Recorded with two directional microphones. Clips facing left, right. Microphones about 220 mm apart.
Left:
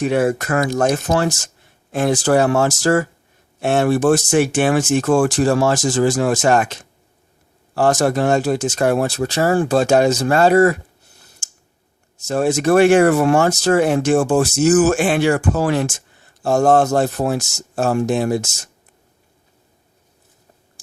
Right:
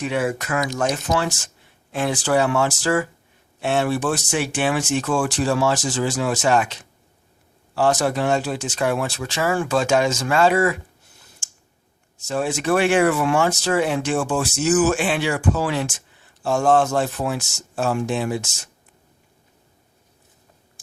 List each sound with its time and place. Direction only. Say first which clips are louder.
0.0 s speech: left 6 dB; 45° left (ahead or behind)
11.4 s a sound: left 1 dB; 40° left (ahead or behind)
12.1 s speech: left 6 dB; 45° left (ahead or behind)